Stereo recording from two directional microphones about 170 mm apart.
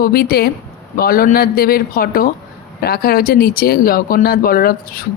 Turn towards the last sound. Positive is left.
turn(degrees=60)  # may be behind; listen again after turning